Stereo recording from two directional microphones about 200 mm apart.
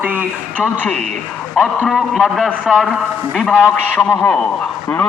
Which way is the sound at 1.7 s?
Centre (ahead or behind).